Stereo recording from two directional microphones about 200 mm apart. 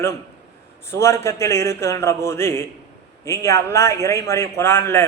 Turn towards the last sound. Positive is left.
turn(degrees=10)  # may be behind; listen again after turning